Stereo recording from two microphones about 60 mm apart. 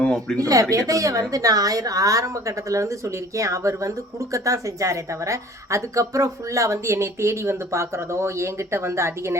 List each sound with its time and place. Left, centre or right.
0.0 s speech: centre
0.3 s a woman's voice: right
1.3 s a woman's voice: right